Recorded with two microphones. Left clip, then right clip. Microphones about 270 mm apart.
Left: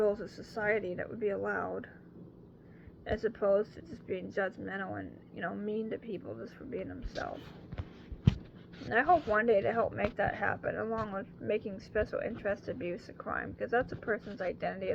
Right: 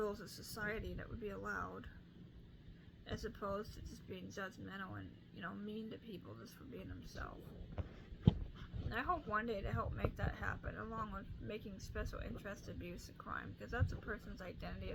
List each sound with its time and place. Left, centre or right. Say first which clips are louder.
0.0 s speech: left 12 dB; right
3.1 s speech: left 15 dB; centre
8.9 s speech: left 13 dB; centre